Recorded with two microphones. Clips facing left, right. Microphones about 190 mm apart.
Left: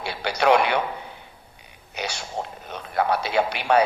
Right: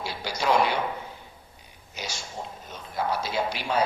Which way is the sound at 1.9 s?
65° left (ahead or behind).